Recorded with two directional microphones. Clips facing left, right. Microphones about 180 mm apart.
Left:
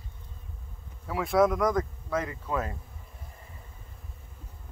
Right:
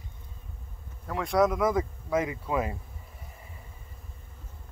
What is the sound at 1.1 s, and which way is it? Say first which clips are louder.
Speech: left 1 dB; centre (ahead or behind).